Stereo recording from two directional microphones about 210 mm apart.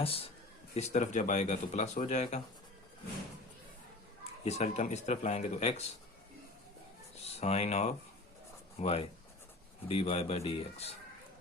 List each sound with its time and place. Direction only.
0.0 s speech: 25° left (ahead or behind)
4.2 s speech: 30° left (ahead or behind)
7.3 s speech: 30° left (ahead or behind)